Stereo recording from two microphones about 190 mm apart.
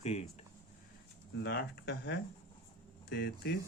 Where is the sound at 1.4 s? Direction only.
60° left (ahead or behind).